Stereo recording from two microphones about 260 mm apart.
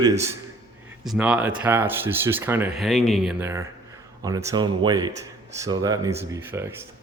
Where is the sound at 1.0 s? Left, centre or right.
Centre.